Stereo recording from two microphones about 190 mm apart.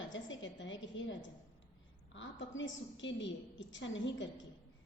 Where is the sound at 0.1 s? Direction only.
75° left (ahead or behind).